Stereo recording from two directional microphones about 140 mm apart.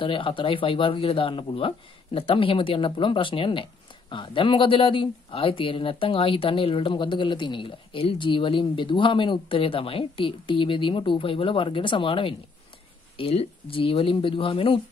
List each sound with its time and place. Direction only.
0.0 s speech: 40° left (ahead or behind)